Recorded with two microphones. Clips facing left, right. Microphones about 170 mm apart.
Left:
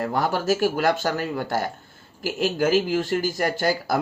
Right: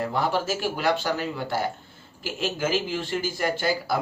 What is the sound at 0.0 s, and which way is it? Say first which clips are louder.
A man's voice: left 2 dB; 45° left (ahead or behind).